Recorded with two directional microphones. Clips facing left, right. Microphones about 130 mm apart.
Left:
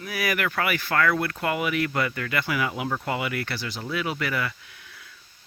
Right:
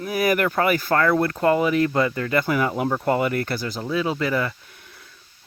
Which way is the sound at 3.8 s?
30° right (ahead or behind).